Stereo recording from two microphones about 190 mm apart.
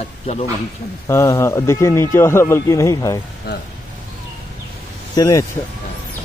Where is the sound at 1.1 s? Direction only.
15° left (ahead or behind).